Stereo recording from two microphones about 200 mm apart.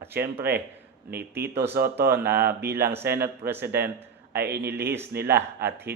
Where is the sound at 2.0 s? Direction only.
50° right (ahead or behind).